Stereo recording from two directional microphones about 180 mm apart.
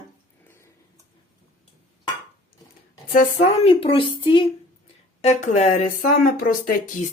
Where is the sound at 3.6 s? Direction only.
30° left (ahead or behind); by 7.1 s 50° left (ahead or behind).